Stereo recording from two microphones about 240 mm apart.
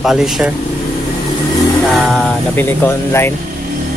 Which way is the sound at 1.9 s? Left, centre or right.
Centre.